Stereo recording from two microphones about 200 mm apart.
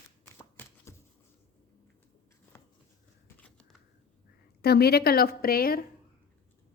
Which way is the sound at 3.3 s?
5° left (ahead or behind).